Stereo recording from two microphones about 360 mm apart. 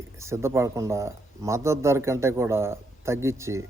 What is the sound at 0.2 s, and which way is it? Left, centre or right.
Speech, centre.